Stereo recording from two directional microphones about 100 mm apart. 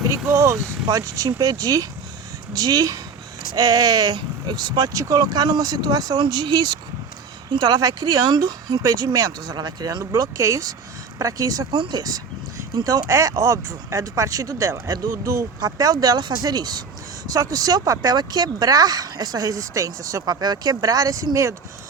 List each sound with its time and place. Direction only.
0.3 s speech: 30° right (ahead or behind)
11.7 s speech: 45° right (ahead or behind)